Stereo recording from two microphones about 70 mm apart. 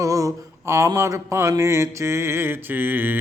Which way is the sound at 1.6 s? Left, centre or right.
Right.